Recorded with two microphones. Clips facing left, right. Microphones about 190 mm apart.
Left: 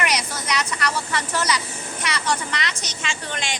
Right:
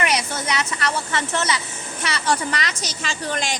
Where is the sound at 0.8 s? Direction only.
25° right (ahead or behind).